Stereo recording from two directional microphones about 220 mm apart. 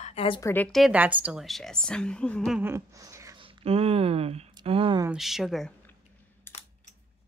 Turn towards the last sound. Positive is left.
turn(degrees=10)  # may be behind; listen again after turning